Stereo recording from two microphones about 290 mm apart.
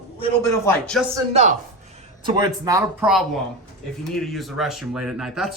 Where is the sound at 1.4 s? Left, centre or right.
Right.